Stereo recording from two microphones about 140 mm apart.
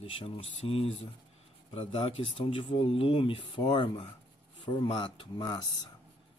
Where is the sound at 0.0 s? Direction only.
40° left (ahead or behind).